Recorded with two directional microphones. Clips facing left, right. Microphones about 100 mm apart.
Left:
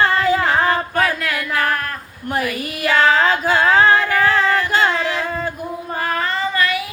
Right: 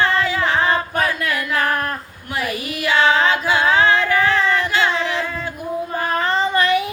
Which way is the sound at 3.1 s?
40° left (ahead or behind).